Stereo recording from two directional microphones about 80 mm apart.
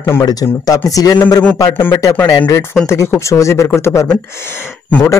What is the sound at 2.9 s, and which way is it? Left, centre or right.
Speech, left.